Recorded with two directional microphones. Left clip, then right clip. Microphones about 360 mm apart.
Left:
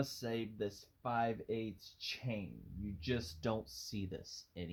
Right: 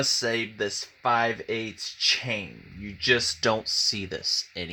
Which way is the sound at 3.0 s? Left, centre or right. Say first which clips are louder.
Right 18 dB; right.